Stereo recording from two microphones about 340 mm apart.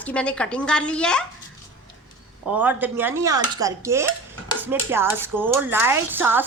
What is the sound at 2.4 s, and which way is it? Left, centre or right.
Speech, centre.